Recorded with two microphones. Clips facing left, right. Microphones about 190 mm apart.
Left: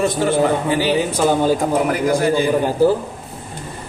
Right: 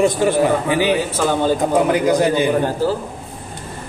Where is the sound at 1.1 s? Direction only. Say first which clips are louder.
Left 2 dB; 15° left (ahead or behind).